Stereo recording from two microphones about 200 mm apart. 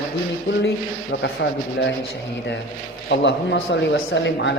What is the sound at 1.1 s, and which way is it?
Speech, 60° left (ahead or behind).